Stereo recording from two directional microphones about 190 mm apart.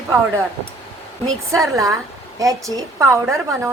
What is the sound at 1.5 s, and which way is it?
A woman's voice, 15° right (ahead or behind).